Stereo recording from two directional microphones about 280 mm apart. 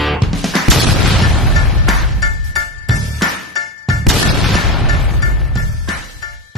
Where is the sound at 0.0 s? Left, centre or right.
Centre.